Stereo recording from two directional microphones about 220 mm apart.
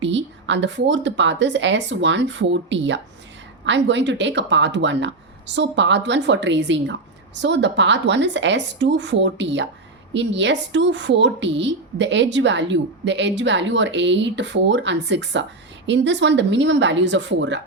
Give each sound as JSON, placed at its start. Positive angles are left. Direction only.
{"t": 0.0, "sound": "a woman's voice", "side_deg": -55}